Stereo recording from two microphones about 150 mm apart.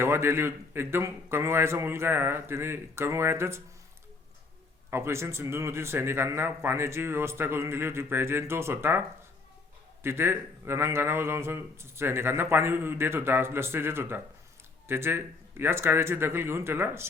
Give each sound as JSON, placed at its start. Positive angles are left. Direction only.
{"t": 0.0, "sound": "a man's voice", "side_deg": -15}
{"t": 4.9, "sound": "a man's voice", "side_deg": -15}